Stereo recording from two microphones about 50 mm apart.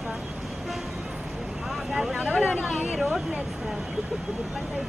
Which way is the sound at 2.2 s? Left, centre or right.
Centre.